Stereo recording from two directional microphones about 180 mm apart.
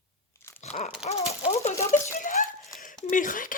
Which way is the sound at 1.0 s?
35° left (ahead or behind).